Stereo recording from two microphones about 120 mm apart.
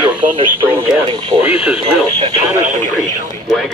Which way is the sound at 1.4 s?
55° left (ahead or behind).